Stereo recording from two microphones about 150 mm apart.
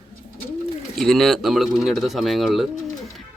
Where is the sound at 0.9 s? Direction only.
Centre (ahead or behind).